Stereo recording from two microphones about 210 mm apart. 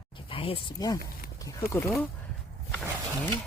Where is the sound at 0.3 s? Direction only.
25° left (ahead or behind).